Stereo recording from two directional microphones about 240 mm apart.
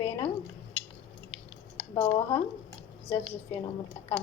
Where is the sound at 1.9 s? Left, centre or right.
Centre.